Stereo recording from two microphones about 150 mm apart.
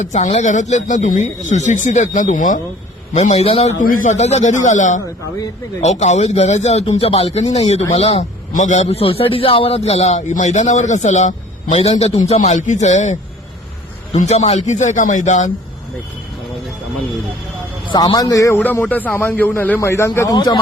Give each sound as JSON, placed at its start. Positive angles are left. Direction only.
{"t": 0.0, "sound": "speech", "side_deg": 50}
{"t": 3.1, "sound": "speech", "side_deg": 50}
{"t": 17.9, "sound": "a man's voice", "side_deg": 25}
{"t": 20.3, "sound": "speech", "side_deg": 30}